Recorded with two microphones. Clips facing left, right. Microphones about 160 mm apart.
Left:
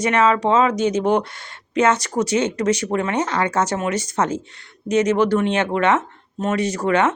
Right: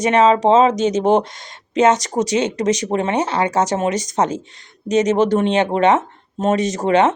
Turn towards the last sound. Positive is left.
turn(degrees=-20)  # may be behind; listen again after turning